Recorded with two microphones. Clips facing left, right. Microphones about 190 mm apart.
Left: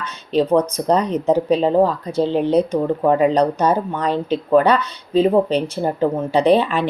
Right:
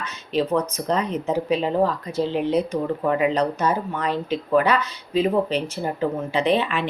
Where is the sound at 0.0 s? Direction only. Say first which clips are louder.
Left 5 dB; 35° left (ahead or behind).